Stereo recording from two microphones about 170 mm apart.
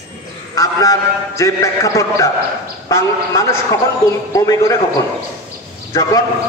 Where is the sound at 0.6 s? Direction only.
20° left (ahead or behind).